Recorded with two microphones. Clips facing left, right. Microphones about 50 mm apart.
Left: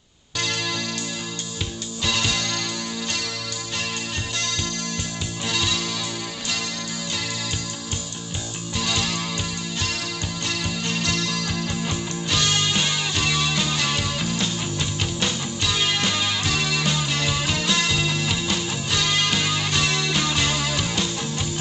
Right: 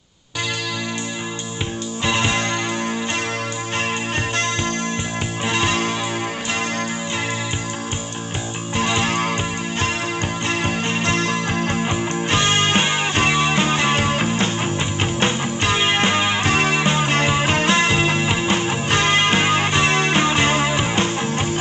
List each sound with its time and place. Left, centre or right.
2.0 s music: right
5.5 s music: right
8.7 s music: right
10.6 s music: right